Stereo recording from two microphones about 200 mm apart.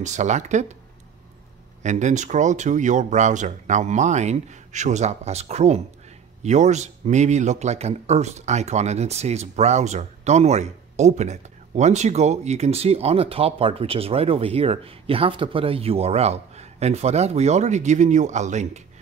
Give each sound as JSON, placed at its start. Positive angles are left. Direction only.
{"t": 0.0, "sound": "a man's voice", "side_deg": -35}
{"t": 1.8, "sound": "a man's voice", "side_deg": -35}